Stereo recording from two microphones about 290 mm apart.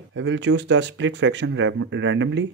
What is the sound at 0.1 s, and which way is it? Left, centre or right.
Speech, right.